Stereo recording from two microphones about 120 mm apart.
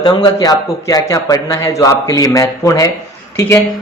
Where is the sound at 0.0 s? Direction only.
30° left (ahead or behind).